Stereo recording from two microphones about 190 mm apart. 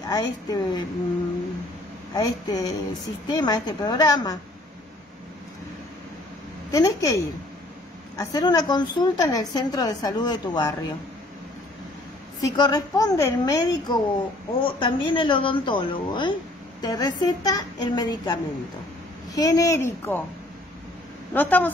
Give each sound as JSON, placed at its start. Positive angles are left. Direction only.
{"t": 0.1, "sound": "a woman's voice", "side_deg": 20}
{"t": 2.1, "sound": "a woman's voice", "side_deg": 20}
{"t": 6.7, "sound": "a woman's voice", "side_deg": 20}
{"t": 12.4, "sound": "a woman's voice", "side_deg": 20}
{"t": 21.3, "sound": "a woman's voice", "side_deg": 10}